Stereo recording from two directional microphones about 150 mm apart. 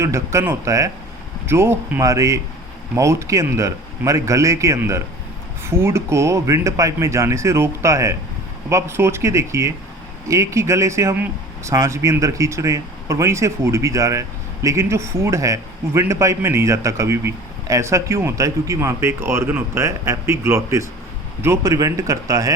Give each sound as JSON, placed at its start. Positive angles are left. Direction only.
{"t": 0.0, "sound": "speech", "side_deg": -20}